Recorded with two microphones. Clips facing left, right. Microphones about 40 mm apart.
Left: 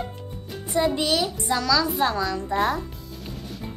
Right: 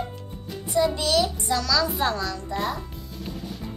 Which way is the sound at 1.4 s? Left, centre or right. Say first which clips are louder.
Left 1 dB; centre.